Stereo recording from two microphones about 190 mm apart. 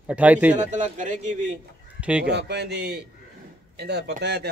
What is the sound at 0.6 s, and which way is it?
Speech, 40° right (ahead or behind).